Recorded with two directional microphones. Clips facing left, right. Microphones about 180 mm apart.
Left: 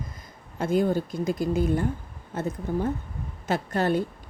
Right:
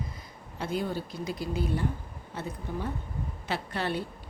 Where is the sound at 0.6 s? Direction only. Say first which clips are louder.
Left 8 dB; 45° left (ahead or behind).